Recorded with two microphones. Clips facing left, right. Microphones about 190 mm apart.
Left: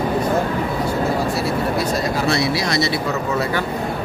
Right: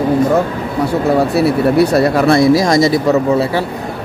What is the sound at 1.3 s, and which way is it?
Speech, 65° right (ahead or behind).